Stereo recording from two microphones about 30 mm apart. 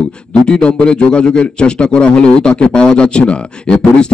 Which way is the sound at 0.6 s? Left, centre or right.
Left.